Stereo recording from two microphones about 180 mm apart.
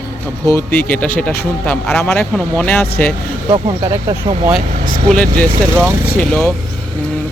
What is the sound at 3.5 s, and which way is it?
Speech, 30° right (ahead or behind).